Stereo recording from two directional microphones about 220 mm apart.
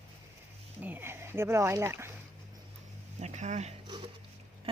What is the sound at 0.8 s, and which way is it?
Speech, 10° right (ahead or behind).